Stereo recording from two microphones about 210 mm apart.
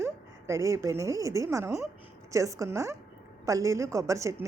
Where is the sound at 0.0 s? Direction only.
15° right (ahead or behind).